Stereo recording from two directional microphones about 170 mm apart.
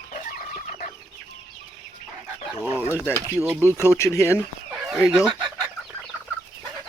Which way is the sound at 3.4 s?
15° right (ahead or behind).